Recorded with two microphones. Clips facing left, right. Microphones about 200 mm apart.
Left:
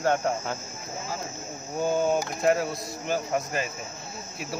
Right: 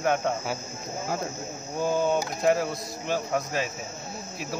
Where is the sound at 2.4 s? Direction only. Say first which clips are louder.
Right 1 dB; centre (ahead or behind).